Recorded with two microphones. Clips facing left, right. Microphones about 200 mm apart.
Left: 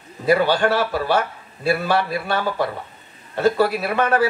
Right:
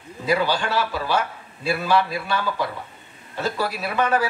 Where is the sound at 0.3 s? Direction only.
55° left (ahead or behind).